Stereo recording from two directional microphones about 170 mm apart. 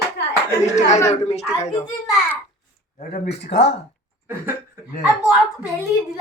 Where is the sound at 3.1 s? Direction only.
70° left (ahead or behind).